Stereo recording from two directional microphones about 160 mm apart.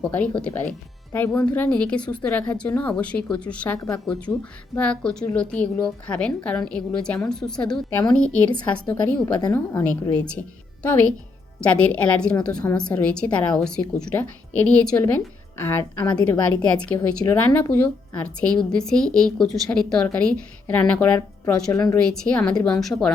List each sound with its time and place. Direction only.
0.4 s a woman's voice: 10° left (ahead or behind)
11.6 s a woman's voice: 10° left (ahead or behind)
16.2 s a woman's voice: 10° left (ahead or behind)